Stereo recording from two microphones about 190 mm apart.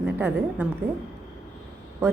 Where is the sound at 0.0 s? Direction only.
10° right (ahead or behind).